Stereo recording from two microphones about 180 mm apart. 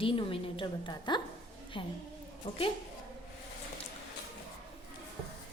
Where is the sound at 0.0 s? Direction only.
30° left (ahead or behind).